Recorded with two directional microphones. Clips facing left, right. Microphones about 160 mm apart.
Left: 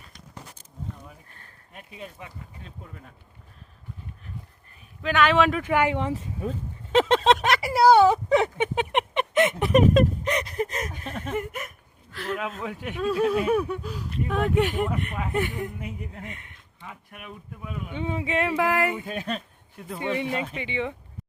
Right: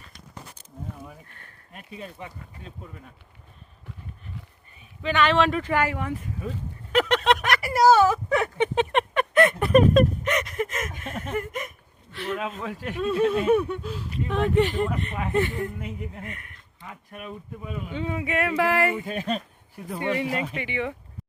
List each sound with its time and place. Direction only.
4.7 s speech: centre (ahead or behind)
5.7 s speech: 20° left (ahead or behind)
8.5 s a sound: 10° left (ahead or behind); by 11.1 s 35° left (ahead or behind)
11.3 s speech: 25° left (ahead or behind)
12.1 s speech: centre (ahead or behind); by 16.5 s 20° left (ahead or behind)
17.9 s speech: 20° left (ahead or behind)
19.0 s speech: centre (ahead or behind)
20.0 s speech: 15° left (ahead or behind)
20.2 s speech: centre (ahead or behind)
20.6 s speech: 20° left (ahead or behind)